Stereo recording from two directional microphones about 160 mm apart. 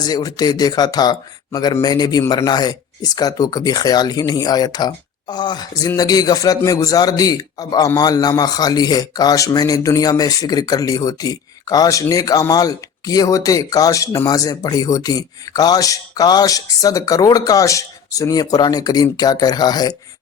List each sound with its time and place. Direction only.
0.0 s a man's voice: 25° left (ahead or behind)